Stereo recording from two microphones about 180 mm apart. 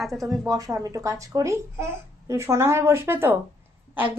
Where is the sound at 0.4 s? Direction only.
20° right (ahead or behind).